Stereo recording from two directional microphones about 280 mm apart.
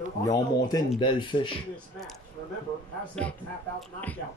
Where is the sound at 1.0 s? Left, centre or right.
Centre.